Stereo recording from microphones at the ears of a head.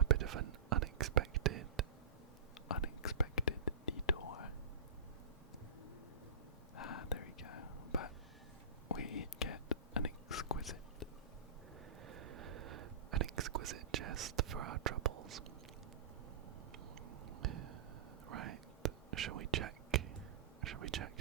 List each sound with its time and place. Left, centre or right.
0.0 s whispering: right
2.6 s whispering: left
6.7 s whispering: left
12.0 s whispering: right
17.1 s a sound: right
18.3 s whispering: right